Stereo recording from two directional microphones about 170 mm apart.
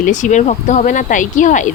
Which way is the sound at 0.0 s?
45° left (ahead or behind).